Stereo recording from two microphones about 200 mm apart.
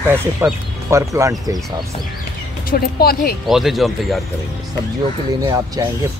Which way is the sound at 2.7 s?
50° left (ahead or behind).